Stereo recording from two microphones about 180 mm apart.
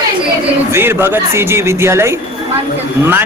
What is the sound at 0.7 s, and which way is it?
A man's voice, 15° right (ahead or behind).